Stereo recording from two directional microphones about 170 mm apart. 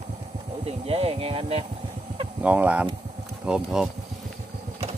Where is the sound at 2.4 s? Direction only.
10° right (ahead or behind).